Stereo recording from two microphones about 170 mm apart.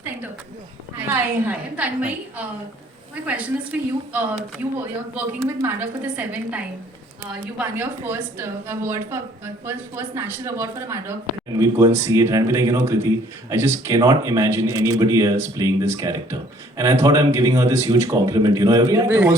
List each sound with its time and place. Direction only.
0.9 s a woman's voice: 10° right (ahead or behind)
7.6 s a woman's voice: 10° right (ahead or behind)